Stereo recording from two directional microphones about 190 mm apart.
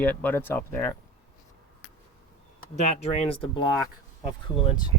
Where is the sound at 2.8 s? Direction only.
35° left (ahead or behind).